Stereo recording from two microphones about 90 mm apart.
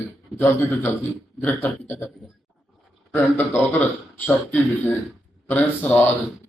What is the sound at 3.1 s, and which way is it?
A man's voice, 25° left (ahead or behind).